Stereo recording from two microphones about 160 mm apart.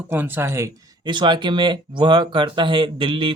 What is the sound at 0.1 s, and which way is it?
Speech, 15° right (ahead or behind).